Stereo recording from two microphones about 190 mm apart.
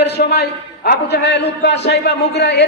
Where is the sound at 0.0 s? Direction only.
60° left (ahead or behind).